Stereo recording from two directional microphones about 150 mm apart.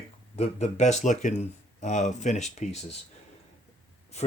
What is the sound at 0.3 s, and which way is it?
Speech, 50° left (ahead or behind).